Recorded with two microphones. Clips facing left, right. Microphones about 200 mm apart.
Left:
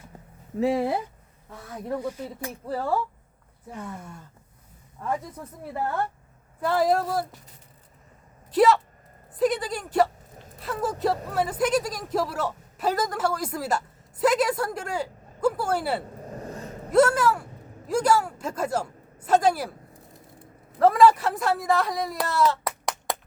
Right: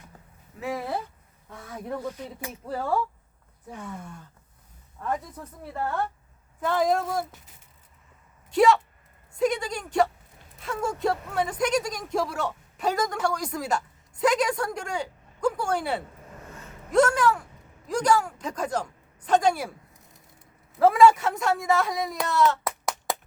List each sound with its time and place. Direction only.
0.6 s speech: 30° left (ahead or behind)
1.5 s speech: 5° left (ahead or behind)
8.4 s speech: centre (ahead or behind)
16.2 s a sound: 40° left (ahead or behind)
16.9 s speech: 5° left (ahead or behind)
20.7 s speech: centre (ahead or behind)